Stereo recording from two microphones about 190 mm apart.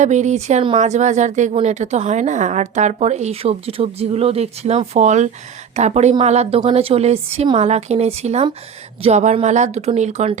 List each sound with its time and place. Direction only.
0.0 s speech: 40° right (ahead or behind)